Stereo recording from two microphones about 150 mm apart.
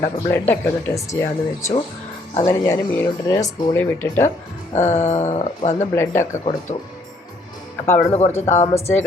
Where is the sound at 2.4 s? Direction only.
20° left (ahead or behind).